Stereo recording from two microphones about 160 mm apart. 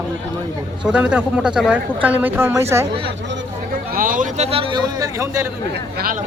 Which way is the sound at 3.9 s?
60° right (ahead or behind).